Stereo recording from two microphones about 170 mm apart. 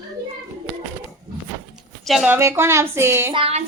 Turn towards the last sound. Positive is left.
turn(degrees=-35)  # may be behind; listen again after turning